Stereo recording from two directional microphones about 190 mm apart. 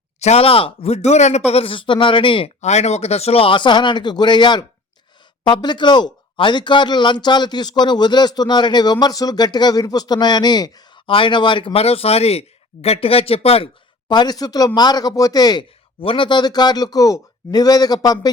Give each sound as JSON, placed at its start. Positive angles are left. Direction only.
{"t": 0.2, "sound": "speech", "side_deg": 35}